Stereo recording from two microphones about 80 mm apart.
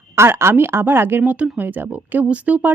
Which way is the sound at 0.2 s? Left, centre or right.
Right.